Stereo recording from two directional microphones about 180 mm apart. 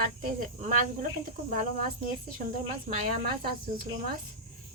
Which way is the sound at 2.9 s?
55° right (ahead or behind).